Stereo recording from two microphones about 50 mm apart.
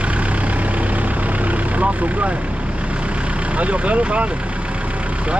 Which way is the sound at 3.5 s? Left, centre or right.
Right.